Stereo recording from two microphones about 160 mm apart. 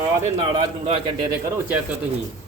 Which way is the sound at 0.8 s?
40° right (ahead or behind).